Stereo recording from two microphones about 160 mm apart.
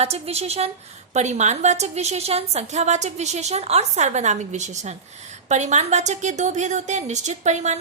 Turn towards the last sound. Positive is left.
turn(degrees=-45)  # may be behind; listen again after turning